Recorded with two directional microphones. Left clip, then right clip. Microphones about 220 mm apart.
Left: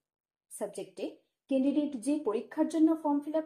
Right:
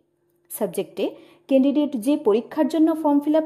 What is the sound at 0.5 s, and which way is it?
Speech, 45° right (ahead or behind).